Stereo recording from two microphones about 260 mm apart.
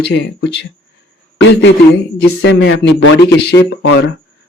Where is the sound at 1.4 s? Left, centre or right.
Left.